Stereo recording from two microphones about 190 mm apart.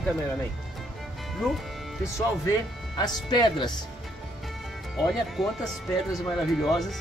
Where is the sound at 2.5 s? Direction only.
20° left (ahead or behind).